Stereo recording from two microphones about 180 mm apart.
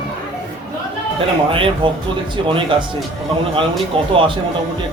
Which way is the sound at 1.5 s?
30° right (ahead or behind).